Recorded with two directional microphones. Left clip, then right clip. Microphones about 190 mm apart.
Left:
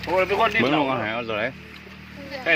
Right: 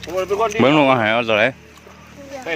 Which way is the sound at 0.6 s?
60° right (ahead or behind).